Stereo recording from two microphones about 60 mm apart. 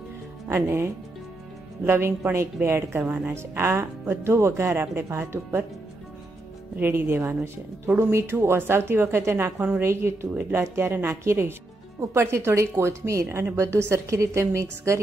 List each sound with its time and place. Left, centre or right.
0.5 s a woman's voice: right
6.8 s speech: right
7.2 s a woman's voice: right